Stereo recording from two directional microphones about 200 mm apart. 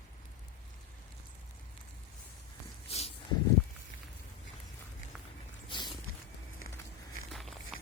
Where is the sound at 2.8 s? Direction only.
30° left (ahead or behind).